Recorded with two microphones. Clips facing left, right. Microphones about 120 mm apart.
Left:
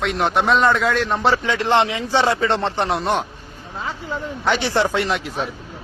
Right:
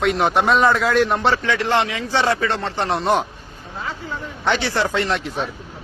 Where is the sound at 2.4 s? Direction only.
25° left (ahead or behind).